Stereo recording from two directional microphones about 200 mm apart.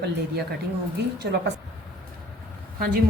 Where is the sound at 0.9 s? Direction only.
55° right (ahead or behind).